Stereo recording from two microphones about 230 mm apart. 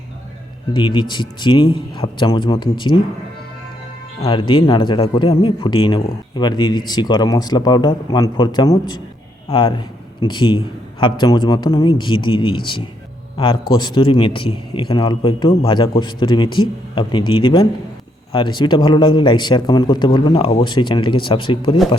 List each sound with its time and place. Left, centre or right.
0.7 s a man's voice: centre
4.2 s a man's voice: left